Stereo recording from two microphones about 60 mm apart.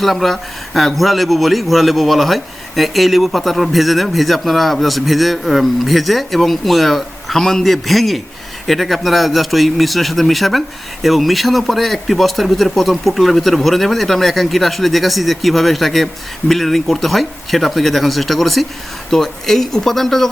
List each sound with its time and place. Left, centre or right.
0.0 s a man's voice: centre